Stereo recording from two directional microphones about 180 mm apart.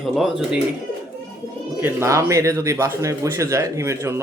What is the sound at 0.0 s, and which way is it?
Speech, centre (ahead or behind).